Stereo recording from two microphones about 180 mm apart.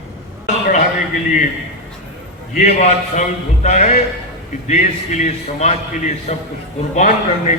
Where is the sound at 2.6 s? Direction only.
40° left (ahead or behind).